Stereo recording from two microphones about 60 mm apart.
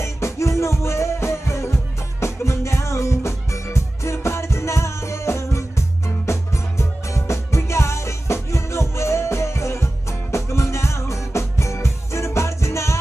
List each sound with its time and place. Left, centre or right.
0.0 s music: left